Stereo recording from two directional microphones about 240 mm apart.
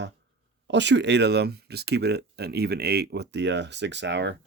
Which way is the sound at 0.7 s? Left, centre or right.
Right.